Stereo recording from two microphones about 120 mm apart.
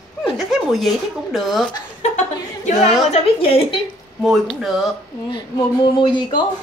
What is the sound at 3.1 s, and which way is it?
Speech, 50° left (ahead or behind).